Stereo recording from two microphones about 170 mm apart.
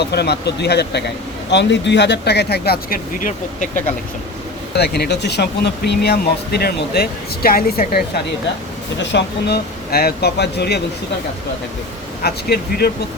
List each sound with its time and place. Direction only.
0.0 s speech: 75° left (ahead or behind)
1.5 s speech: 90° left; by 3.9 s 50° left (ahead or behind)
4.7 s speech: 75° left (ahead or behind); by 8.0 s 60° left (ahead or behind)
9.0 s speech: 85° left
12.2 s speech: 65° left (ahead or behind)